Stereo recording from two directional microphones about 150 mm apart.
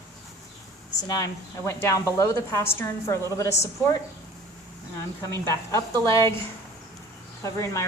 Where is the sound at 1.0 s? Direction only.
25° left (ahead or behind).